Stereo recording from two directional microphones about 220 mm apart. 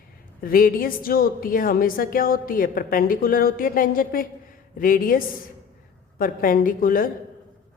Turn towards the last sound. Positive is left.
turn(degrees=40)  # may be behind; listen again after turning